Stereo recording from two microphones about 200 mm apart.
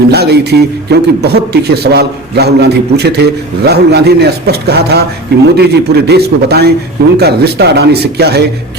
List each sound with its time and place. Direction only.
0.1 s a man's voice: 55° right (ahead or behind)